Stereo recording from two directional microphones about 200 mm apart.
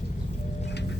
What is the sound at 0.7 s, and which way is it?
Vehicle, 60° left (ahead or behind).